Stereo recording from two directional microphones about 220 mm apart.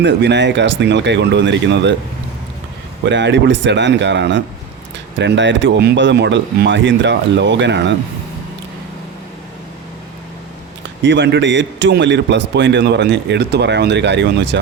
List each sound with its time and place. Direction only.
0.0 s a man's voice: 55° right (ahead or behind)
3.0 s a man's voice: 55° right (ahead or behind)
11.0 s a man's voice: 50° right (ahead or behind)